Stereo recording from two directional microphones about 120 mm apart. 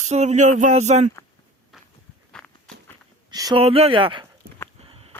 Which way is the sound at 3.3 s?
35° right (ahead or behind).